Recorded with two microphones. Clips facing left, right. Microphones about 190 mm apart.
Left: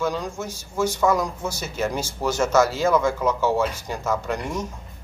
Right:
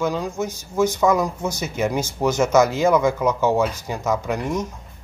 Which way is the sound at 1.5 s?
15° right (ahead or behind).